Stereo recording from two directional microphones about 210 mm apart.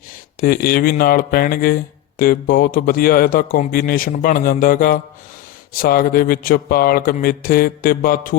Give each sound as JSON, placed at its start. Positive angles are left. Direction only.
{"t": 0.4, "sound": "speech", "side_deg": 45}